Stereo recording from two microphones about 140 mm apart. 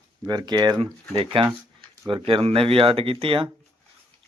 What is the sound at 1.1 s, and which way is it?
Speech, 40° right (ahead or behind).